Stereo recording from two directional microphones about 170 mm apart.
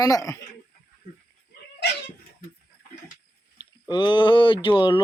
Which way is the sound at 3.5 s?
25° left (ahead or behind).